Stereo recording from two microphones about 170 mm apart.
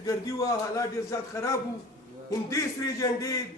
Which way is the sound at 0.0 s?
20° left (ahead or behind).